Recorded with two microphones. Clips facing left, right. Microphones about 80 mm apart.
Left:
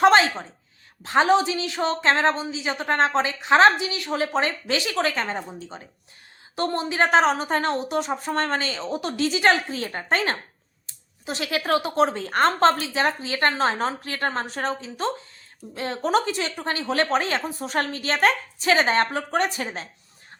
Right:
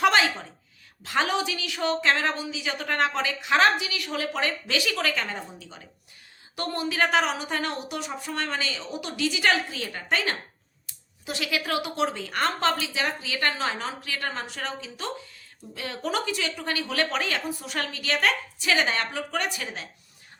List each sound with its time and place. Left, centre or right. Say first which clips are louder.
0.0 s a woman's voice: left 5 dB; left